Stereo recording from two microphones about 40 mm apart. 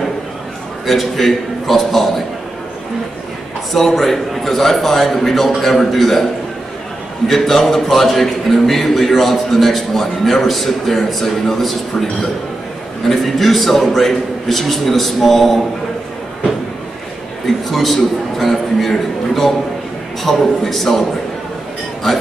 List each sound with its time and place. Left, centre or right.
0.8 s speech: centre
3.7 s speech: centre
7.2 s speech: centre
17.6 s speech: centre